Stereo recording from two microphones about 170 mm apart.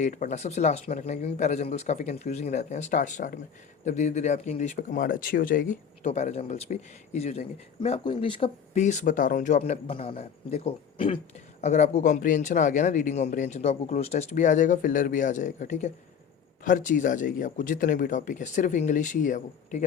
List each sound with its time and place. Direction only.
0.0 s speech: 50° left (ahead or behind)